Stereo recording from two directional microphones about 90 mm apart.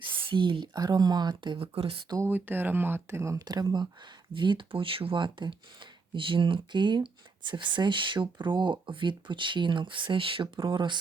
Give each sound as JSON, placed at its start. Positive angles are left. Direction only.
{"t": 0.0, "sound": "speech", "side_deg": -75}
{"t": 1.5, "sound": "speech", "side_deg": -90}
{"t": 2.2, "sound": "speech", "side_deg": -20}
{"t": 3.4, "sound": "speech", "side_deg": -50}
{"t": 4.4, "sound": "speech", "side_deg": -65}